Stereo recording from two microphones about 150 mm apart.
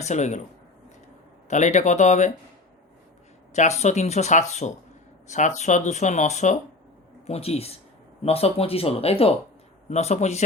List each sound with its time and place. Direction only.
0.0 s speech: 50° left (ahead or behind)
1.5 s speech: 55° left (ahead or behind)
3.5 s speech: 50° left (ahead or behind)